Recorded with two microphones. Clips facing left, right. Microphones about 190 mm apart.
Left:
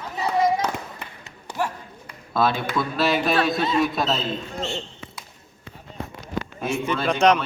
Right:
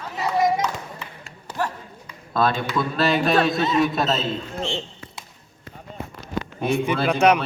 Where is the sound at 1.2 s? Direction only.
10° left (ahead or behind).